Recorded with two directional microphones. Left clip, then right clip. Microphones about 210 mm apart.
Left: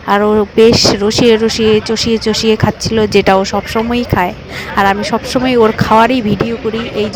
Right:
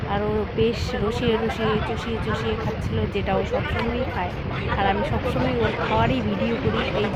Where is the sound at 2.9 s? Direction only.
50° left (ahead or behind).